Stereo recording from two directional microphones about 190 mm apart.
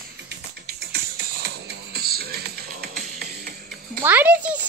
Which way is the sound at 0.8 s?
55° right (ahead or behind).